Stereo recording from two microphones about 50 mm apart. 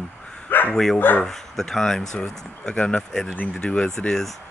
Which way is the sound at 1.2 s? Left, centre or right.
Centre.